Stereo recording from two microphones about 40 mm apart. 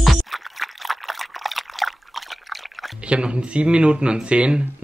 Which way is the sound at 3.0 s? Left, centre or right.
Right.